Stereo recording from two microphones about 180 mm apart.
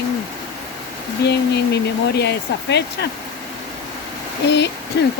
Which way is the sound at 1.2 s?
70° left (ahead or behind).